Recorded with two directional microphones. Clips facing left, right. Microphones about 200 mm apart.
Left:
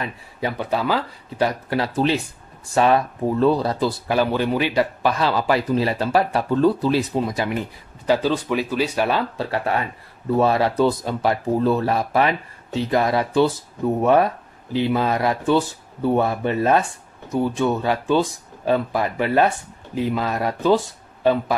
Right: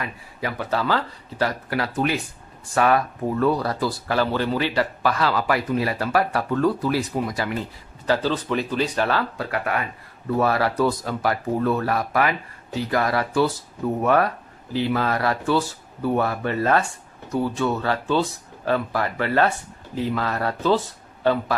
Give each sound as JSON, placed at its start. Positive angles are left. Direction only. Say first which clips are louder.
{"t": 0.0, "sound": "speech", "louder": "left 3 dB", "side_deg": 25}
{"t": 1.7, "sound": "speech", "louder": "left 3 dB", "side_deg": 25}
{"t": 9.4, "sound": "speech", "louder": "left 3 dB", "side_deg": 30}